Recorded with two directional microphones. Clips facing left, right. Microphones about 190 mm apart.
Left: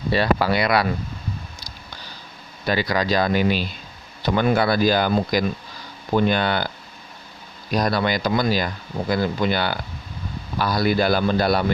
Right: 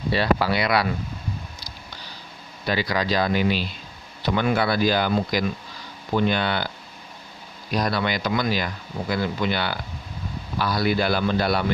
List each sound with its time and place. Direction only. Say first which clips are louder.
0.1 s speech: left 2 dB; 45° left (ahead or behind)
2.6 s speech: left 2 dB; 45° left (ahead or behind)
7.7 s speech: left 3 dB; 45° left (ahead or behind)